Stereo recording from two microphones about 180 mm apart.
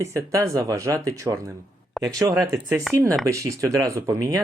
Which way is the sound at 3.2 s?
15° right (ahead or behind).